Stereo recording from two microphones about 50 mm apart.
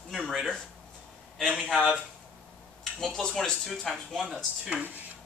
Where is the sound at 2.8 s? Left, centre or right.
Centre.